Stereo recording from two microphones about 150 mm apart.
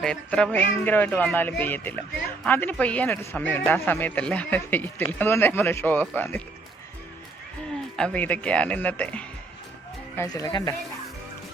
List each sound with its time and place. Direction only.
0.0 s speech: 5° left (ahead or behind)
7.9 s speech: 5° left (ahead or behind)
10.2 s speech: 25° left (ahead or behind)